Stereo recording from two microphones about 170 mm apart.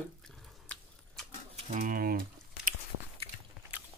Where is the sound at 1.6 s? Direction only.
45° right (ahead or behind).